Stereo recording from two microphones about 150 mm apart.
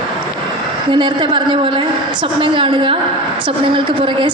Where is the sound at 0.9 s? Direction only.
30° right (ahead or behind).